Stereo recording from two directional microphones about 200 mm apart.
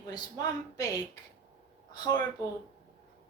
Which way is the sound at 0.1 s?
20° left (ahead or behind).